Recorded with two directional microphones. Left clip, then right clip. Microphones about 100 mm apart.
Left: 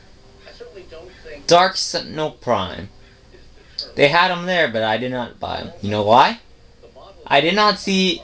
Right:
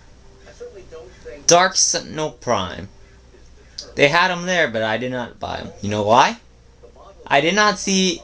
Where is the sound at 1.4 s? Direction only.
15° right (ahead or behind).